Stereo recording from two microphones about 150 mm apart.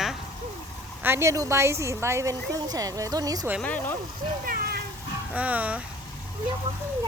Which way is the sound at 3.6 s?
10° left (ahead or behind).